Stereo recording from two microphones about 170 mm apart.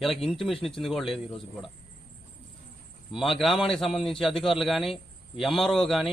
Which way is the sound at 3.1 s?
Centre (ahead or behind).